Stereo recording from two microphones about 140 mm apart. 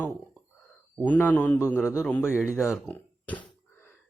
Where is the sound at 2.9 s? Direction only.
10° left (ahead or behind).